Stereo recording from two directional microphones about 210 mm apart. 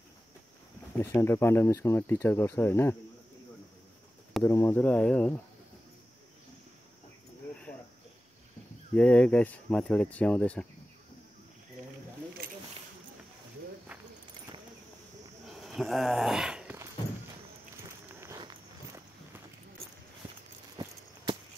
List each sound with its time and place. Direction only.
0.9 s speech: 10° left (ahead or behind)
4.4 s speech: 10° left (ahead or behind)
8.9 s speech: 5° left (ahead or behind)
15.4 s a sound: centre (ahead or behind)
17.8 s walk: 15° right (ahead or behind)
20.7 s a sound: 20° right (ahead or behind)